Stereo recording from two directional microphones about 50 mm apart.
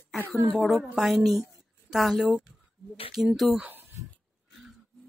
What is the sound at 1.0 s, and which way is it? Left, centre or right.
Speech, centre.